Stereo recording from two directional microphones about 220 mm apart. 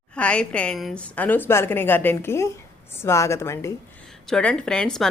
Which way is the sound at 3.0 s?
15° left (ahead or behind).